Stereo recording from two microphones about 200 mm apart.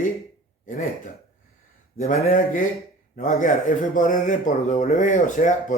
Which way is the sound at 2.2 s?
40° left (ahead or behind).